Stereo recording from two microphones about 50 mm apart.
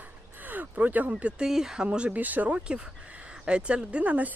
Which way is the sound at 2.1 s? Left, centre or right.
Right.